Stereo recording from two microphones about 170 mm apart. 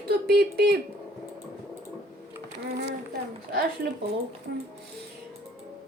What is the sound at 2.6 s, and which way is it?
A woman's voice, 80° right.